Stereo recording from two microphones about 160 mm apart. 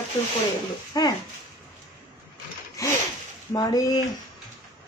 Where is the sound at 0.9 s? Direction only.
25° left (ahead or behind).